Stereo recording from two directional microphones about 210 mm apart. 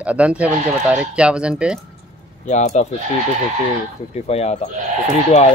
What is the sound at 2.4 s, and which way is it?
Speech, 35° left (ahead or behind).